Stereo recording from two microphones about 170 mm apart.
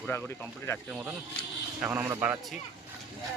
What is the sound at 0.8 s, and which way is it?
Speech, 5° right (ahead or behind).